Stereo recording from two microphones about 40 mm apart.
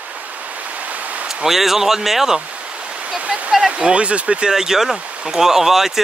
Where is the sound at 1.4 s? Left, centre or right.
Centre.